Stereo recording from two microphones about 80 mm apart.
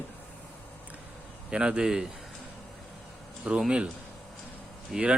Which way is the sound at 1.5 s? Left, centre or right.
Centre.